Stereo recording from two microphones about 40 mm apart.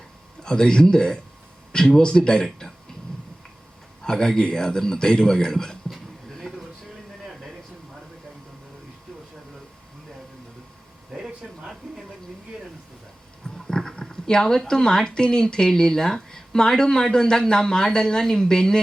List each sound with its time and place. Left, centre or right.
0.4 s speech: centre
4.0 s speech: centre
11.1 s a sound: centre
13.7 s speech: centre